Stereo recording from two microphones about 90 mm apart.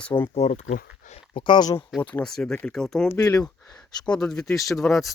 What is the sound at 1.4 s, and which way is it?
Speech, 55° left (ahead or behind).